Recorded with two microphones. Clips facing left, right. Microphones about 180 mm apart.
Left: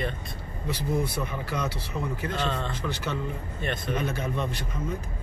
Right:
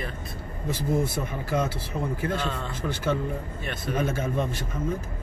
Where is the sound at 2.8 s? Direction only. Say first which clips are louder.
Right 8 dB; 50° right (ahead or behind).